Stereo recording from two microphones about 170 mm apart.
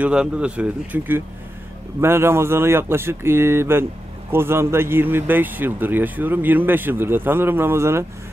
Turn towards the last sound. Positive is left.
turn(degrees=-15)  # may be behind; listen again after turning